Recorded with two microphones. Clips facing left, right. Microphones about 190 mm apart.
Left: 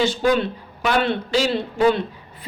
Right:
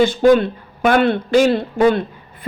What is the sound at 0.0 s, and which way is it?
A man's voice, 50° right (ahead or behind).